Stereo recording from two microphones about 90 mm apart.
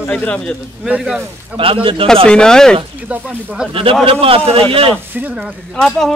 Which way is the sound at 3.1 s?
15° right (ahead or behind).